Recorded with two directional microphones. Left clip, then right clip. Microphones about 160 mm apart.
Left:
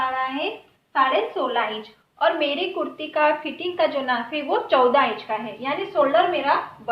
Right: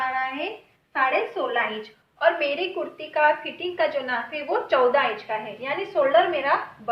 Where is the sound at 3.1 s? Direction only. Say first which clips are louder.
Even; 20° left (ahead or behind).